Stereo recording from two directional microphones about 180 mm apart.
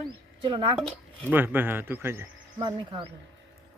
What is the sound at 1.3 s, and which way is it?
Speech, 10° right (ahead or behind).